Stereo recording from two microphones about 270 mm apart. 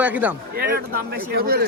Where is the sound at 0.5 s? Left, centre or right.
Right.